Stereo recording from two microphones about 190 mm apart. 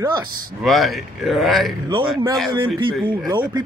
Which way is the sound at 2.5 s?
25° right (ahead or behind).